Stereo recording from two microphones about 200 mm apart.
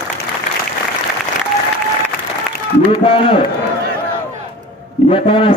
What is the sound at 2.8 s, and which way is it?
Speech, 25° left (ahead or behind).